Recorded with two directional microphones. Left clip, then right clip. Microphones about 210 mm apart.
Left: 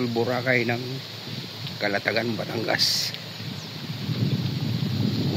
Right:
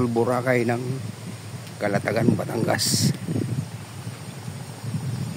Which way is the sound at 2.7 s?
25° right (ahead or behind).